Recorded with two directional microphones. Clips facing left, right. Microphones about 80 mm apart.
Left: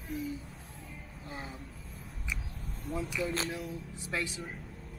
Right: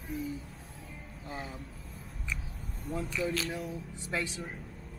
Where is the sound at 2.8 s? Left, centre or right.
Centre.